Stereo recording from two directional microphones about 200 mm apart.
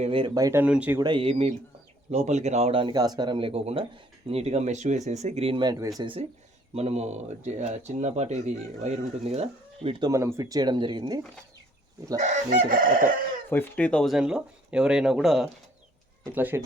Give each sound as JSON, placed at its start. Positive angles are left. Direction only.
{"t": 0.0, "sound": "speech", "side_deg": -25}
{"t": 1.0, "sound": "speech", "side_deg": -25}
{"t": 10.1, "sound": "speech", "side_deg": -15}
{"t": 12.2, "sound": "chicken", "side_deg": -40}
{"t": 13.5, "sound": "speech", "side_deg": 10}